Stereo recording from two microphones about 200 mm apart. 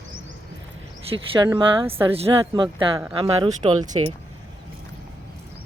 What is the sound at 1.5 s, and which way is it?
Speech, 25° right (ahead or behind).